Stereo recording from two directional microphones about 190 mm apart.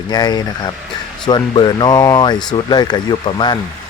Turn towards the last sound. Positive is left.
turn(degrees=25)  # may be behind; listen again after turning